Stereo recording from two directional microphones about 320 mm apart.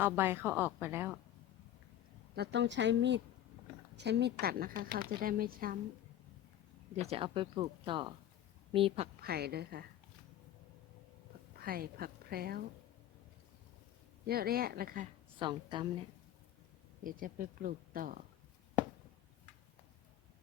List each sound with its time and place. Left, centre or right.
0.0 s speech: centre
2.3 s speech: right
6.9 s speech: centre
9.2 s speech: right
11.6 s a woman's voice: right
14.3 s speech: right
15.4 s speech: centre
17.0 s speech: right